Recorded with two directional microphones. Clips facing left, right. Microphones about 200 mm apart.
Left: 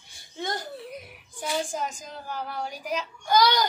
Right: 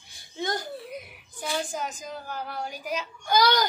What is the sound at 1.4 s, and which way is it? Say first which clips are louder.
A child's voice: left 1 dB; 5° right (ahead or behind).